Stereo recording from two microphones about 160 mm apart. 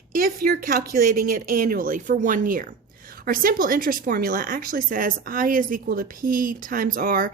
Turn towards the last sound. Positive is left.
turn(degrees=-60)  # may be behind; listen again after turning